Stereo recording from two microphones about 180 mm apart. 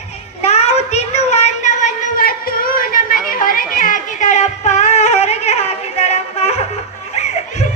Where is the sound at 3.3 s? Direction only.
50° left (ahead or behind).